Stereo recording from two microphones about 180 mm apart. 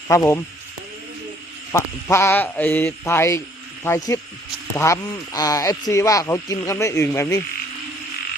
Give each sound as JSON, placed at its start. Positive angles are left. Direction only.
{"t": 0.1, "sound": "speech", "side_deg": 20}
{"t": 1.7, "sound": "speech", "side_deg": 15}